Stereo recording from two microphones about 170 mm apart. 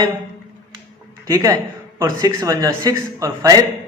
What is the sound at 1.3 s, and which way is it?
A man's voice, 20° right (ahead or behind).